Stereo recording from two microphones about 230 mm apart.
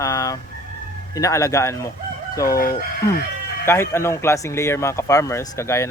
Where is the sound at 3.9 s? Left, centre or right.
Centre.